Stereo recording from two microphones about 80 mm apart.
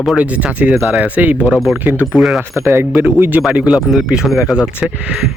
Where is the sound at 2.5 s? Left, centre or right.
Right.